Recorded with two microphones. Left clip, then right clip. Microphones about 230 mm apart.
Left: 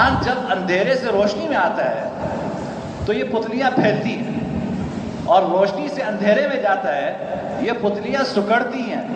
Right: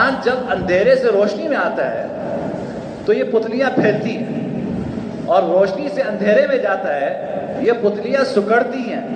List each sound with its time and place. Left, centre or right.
0.0 s a man's voice: centre
3.1 s a man's voice: centre
5.3 s a man's voice: centre